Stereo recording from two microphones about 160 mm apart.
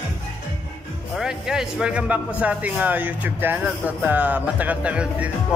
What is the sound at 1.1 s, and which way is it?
A man's voice, 5° right (ahead or behind).